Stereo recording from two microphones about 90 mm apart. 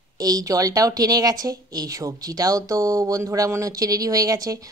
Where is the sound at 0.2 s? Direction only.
45° right (ahead or behind).